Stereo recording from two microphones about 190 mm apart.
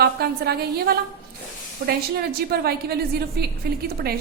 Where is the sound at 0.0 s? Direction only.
55° right (ahead or behind).